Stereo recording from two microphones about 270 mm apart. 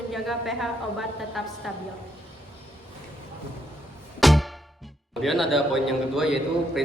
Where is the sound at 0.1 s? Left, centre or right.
Centre.